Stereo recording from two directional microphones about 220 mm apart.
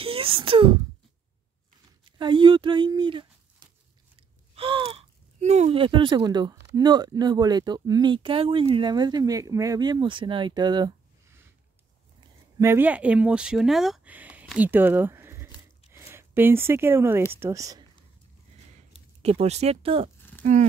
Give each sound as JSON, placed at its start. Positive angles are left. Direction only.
{"t": 0.0, "sound": "a sound", "side_deg": -25}
{"t": 2.0, "sound": "speech", "side_deg": -20}
{"t": 12.5, "sound": "speech", "side_deg": -10}
{"t": 19.2, "sound": "speech", "side_deg": -30}